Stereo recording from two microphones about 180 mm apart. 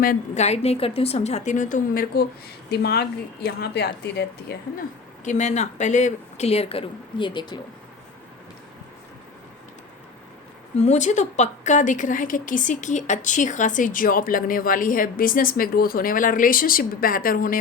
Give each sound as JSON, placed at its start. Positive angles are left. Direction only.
{"t": 0.0, "sound": "a woman's voice", "side_deg": 50}
{"t": 0.4, "sound": "speech", "side_deg": 35}
{"t": 2.6, "sound": "speech", "side_deg": 65}
{"t": 5.2, "sound": "speech", "side_deg": 40}
{"t": 10.8, "sound": "a woman's voice", "side_deg": 40}